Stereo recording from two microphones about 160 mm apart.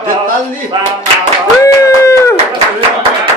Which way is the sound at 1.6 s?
20° left (ahead or behind).